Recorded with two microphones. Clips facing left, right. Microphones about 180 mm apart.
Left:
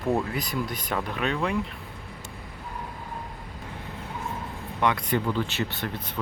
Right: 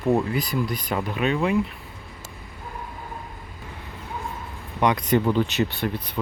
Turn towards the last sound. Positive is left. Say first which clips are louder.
# right 5 dB
turn(degrees=-15)  # may be behind; listen again after turning